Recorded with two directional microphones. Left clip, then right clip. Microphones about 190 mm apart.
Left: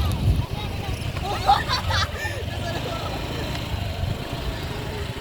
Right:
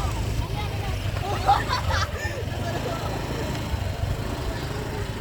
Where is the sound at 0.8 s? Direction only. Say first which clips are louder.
Even; 40° right (ahead or behind).